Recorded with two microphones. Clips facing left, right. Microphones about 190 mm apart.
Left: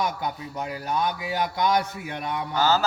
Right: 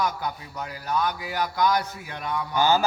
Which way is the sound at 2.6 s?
15° right (ahead or behind).